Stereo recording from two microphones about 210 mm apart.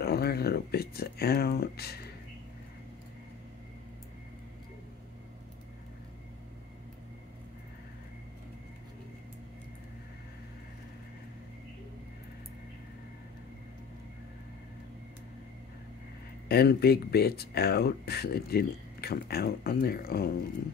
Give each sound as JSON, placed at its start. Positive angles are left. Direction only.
{"t": 0.0, "sound": "speech", "side_deg": 50}
{"t": 16.4, "sound": "speech", "side_deg": 50}